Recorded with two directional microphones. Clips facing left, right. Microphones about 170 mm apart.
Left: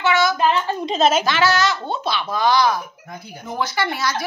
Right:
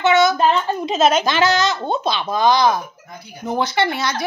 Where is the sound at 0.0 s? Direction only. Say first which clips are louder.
Right 4 dB; 20° right (ahead or behind).